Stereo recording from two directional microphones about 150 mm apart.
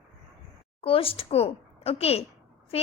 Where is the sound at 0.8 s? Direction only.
40° left (ahead or behind).